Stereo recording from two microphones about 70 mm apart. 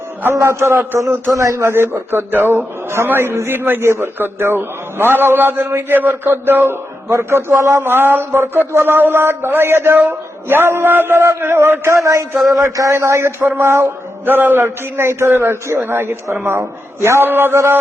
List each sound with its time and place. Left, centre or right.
0.3 s a man's voice: right
12.5 s a man's voice: right